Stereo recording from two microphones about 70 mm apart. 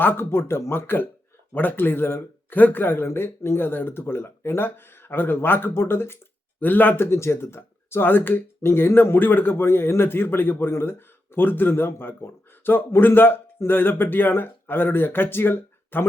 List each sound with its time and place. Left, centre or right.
0.0 s speech: left